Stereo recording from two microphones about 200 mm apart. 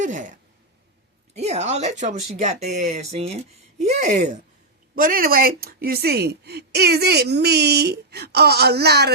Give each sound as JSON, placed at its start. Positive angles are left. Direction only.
{"t": 0.0, "sound": "speech", "side_deg": -40}